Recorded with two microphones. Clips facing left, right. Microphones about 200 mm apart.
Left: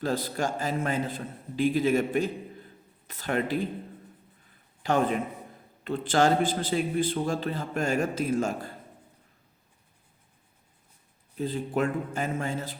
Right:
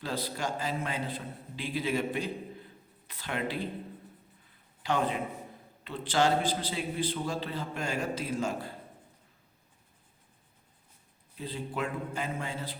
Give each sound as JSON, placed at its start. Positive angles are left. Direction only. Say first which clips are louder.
{"t": 0.0, "sound": "a man's voice", "louder": "left 6 dB", "side_deg": 45}
{"t": 4.8, "sound": "a man's voice", "louder": "left 5 dB", "side_deg": 50}
{"t": 11.3, "sound": "a man's voice", "louder": "left 7 dB", "side_deg": 45}